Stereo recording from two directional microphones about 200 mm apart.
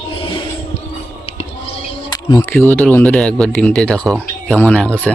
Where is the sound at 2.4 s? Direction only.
10° left (ahead or behind).